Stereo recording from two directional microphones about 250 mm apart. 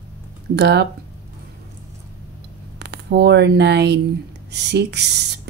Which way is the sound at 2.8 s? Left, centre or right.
Right.